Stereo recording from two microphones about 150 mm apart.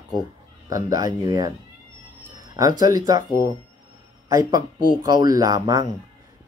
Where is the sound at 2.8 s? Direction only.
25° right (ahead or behind).